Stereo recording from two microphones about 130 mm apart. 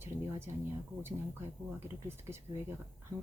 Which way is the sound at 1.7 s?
20° right (ahead or behind).